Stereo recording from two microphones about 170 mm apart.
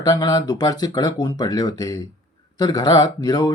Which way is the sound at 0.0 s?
20° left (ahead or behind).